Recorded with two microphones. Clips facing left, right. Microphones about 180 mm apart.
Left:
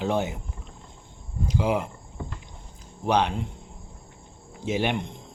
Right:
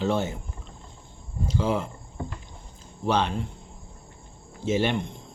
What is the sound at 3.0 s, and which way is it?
Speech, 15° left (ahead or behind).